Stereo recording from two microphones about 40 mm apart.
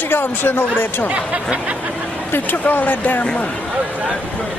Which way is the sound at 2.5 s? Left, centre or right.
Left.